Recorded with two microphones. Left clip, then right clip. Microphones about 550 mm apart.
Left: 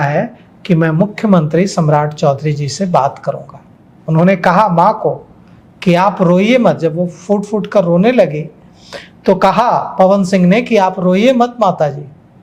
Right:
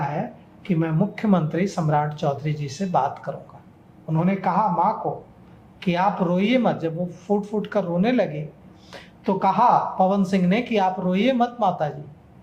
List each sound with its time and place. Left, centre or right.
0.6 s a woman's voice: left